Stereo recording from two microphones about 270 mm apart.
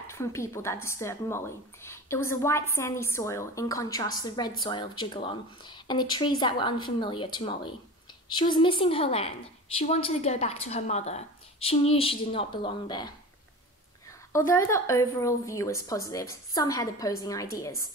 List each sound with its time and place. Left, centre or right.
0.0 s a woman's voice: centre
14.3 s a woman's voice: centre